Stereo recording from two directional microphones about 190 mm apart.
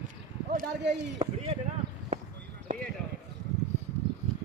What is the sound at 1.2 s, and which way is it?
Speech, 35° right (ahead or behind).